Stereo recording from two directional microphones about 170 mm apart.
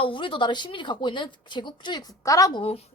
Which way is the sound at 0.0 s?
30° left (ahead or behind).